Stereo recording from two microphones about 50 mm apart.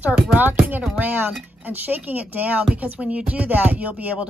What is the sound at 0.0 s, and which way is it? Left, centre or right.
A woman's voice, right.